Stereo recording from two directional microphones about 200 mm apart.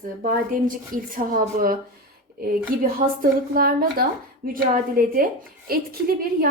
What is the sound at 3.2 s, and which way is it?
A woman's voice, 45° right (ahead or behind).